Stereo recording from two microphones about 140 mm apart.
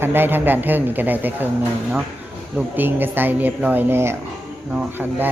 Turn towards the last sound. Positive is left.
turn(degrees=-15)  # may be behind; listen again after turning